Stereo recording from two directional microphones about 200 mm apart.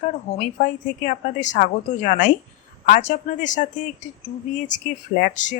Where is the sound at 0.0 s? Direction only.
40° left (ahead or behind).